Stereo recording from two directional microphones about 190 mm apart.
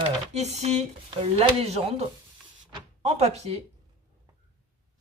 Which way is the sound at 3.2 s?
35° right (ahead or behind).